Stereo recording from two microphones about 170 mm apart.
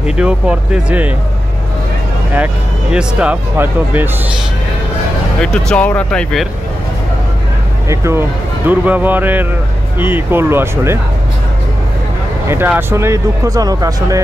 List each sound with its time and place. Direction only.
0.0 s speech: 5° right (ahead or behind)
2.3 s speech: 5° right (ahead or behind)
5.4 s speech: 5° left (ahead or behind)
7.9 s speech: 15° right (ahead or behind)
12.4 s speech: 10° right (ahead or behind)